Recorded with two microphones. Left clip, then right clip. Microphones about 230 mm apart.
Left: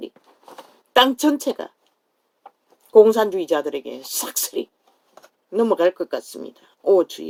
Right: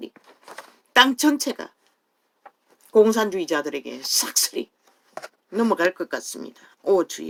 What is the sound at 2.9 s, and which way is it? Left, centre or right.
Speech, right.